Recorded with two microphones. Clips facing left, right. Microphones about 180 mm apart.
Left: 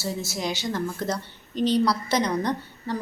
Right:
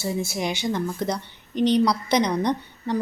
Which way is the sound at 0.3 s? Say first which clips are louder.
Right 2 dB; 15° right (ahead or behind).